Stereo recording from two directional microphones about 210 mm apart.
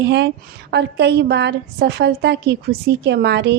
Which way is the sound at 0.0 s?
55° right (ahead or behind).